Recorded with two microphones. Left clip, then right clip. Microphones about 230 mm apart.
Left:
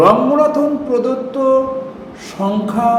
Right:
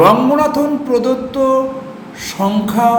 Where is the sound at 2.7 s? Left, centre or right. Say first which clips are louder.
Right 2 dB; centre.